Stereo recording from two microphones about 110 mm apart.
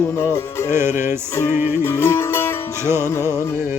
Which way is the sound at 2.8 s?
25° right (ahead or behind).